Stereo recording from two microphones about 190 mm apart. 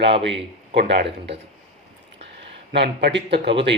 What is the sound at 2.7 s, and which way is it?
Speech, 65° right (ahead or behind).